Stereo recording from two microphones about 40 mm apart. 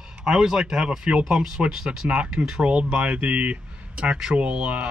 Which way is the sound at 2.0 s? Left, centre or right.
Right.